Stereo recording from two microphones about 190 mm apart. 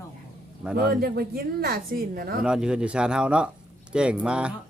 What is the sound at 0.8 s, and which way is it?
Speech, 50° right (ahead or behind).